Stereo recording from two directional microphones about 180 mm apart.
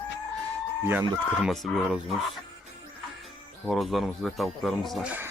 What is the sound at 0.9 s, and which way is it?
Speech, 5° right (ahead or behind).